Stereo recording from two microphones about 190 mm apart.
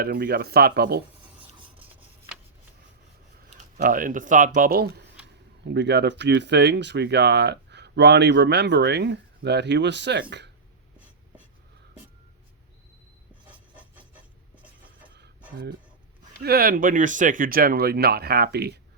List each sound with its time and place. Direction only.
0.0 s speech: 50° right (ahead or behind)
3.8 s speech: 45° right (ahead or behind)
5.6 s speech: 65° right (ahead or behind)
13.5 s a sound: 10° right (ahead or behind)
16.4 s speech: 50° right (ahead or behind)